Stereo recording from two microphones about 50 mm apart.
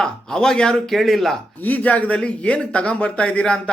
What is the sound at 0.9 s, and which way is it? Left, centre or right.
Speech, centre.